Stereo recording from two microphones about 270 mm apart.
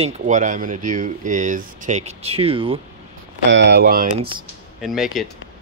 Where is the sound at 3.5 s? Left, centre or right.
Right.